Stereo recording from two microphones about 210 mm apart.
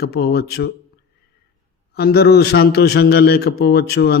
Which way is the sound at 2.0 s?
50° left (ahead or behind).